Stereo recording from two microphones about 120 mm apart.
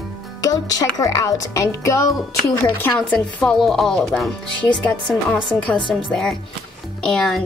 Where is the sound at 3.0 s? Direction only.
10° left (ahead or behind).